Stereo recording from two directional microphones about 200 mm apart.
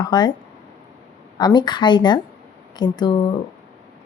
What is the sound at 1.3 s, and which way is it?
A woman's voice, 20° left (ahead or behind).